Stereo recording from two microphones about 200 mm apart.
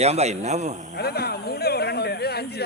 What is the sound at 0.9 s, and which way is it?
Speech, 55° left (ahead or behind).